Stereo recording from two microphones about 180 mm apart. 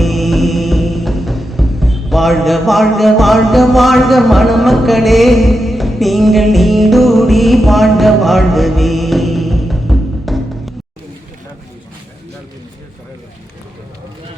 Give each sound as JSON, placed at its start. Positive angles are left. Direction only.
{"t": 0.0, "sound": "music", "side_deg": 0}